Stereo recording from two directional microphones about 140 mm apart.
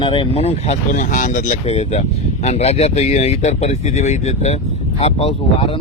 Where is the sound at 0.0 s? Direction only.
40° left (ahead or behind); by 1.5 s 70° left (ahead or behind).